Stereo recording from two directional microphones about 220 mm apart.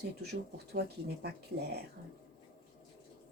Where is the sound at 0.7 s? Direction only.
45° right (ahead or behind).